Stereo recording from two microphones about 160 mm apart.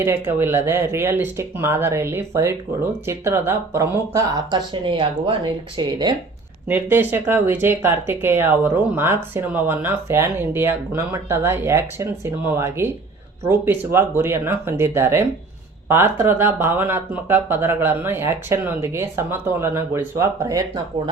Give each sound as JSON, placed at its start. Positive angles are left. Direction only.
{"t": 0.0, "sound": "speech", "side_deg": -15}
{"t": 6.7, "sound": "speech", "side_deg": -10}